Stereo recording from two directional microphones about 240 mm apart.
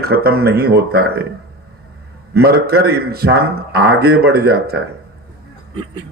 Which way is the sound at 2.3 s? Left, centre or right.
Right.